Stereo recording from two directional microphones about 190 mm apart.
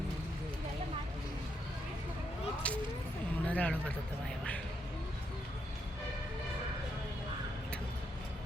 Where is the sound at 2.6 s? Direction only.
5° left (ahead or behind).